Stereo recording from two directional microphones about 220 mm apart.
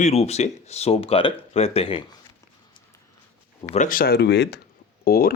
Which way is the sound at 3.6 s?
35° left (ahead or behind).